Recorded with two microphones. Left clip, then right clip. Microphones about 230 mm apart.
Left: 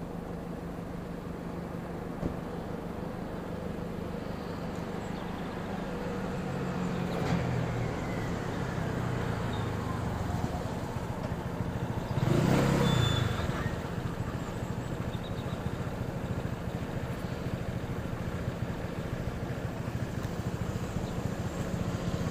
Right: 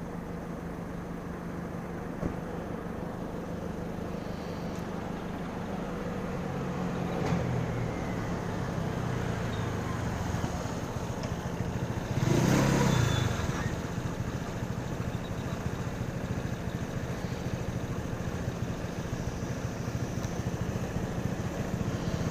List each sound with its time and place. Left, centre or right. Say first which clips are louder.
12.2 s vehicle: right 1 dB; right